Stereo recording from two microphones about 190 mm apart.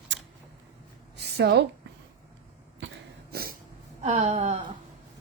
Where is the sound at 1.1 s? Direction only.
60° right (ahead or behind).